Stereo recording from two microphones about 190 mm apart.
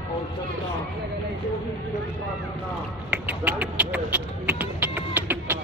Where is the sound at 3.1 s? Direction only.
5° right (ahead or behind).